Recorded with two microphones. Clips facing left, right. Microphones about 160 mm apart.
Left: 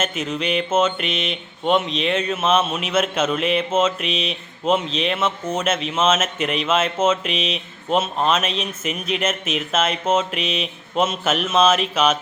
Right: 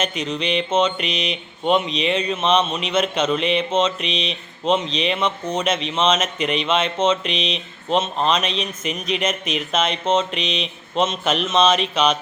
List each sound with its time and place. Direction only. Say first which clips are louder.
0.0 s mantra: even; 5° left (ahead or behind)